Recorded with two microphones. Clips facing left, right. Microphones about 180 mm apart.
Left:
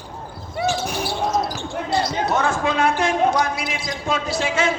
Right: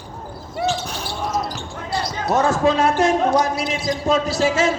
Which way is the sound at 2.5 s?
40° right (ahead or behind).